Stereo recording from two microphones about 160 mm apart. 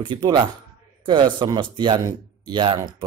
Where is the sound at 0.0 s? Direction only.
30° right (ahead or behind).